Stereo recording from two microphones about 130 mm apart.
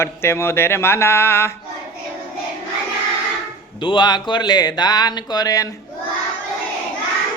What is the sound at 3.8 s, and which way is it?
Speech, 35° left (ahead or behind).